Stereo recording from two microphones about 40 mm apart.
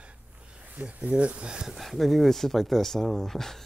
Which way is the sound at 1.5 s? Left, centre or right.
Centre.